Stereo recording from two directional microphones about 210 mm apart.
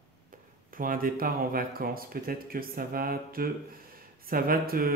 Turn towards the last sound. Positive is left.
turn(degrees=-45)  # may be behind; listen again after turning